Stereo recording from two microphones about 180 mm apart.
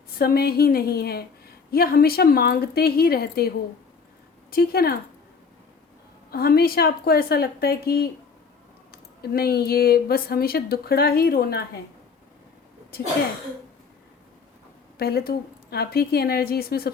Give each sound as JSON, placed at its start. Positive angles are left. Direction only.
{"t": 0.2, "sound": "speech", "side_deg": 60}
{"t": 4.5, "sound": "speech", "side_deg": 60}
{"t": 6.3, "sound": "speech", "side_deg": 55}
{"t": 14.9, "sound": "speech", "side_deg": 60}